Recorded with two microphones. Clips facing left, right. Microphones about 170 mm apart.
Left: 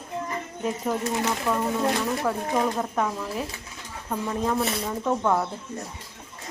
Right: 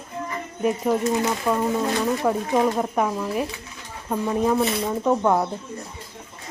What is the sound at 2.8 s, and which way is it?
Speech, 15° right (ahead or behind).